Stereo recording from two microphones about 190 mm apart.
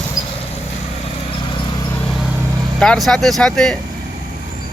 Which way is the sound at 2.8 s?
5° left (ahead or behind).